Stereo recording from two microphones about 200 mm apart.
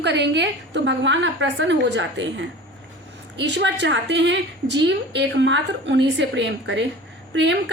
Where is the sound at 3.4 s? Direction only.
60° right (ahead or behind).